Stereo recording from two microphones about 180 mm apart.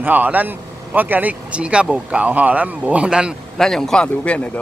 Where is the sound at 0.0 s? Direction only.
10° right (ahead or behind).